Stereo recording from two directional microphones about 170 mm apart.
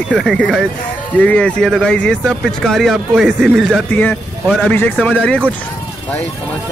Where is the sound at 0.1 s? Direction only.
5° left (ahead or behind).